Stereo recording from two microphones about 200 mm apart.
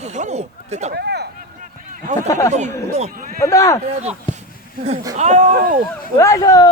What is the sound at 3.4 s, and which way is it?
Speech, 15° left (ahead or behind).